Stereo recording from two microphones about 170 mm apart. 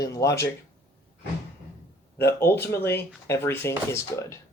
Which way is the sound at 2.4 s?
15° left (ahead or behind).